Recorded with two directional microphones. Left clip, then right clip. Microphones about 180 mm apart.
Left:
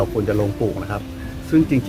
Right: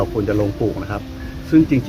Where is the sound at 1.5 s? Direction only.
5° left (ahead or behind).